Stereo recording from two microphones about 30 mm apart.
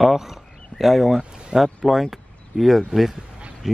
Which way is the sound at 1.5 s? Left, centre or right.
Right.